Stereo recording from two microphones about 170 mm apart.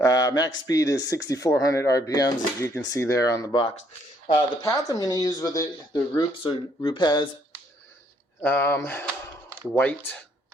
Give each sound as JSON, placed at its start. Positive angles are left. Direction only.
{"t": 0.0, "sound": "speech", "side_deg": 20}
{"t": 8.4, "sound": "speech", "side_deg": 10}